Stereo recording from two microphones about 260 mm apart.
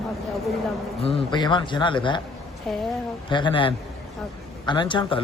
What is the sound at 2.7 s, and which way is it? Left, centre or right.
Speech, centre.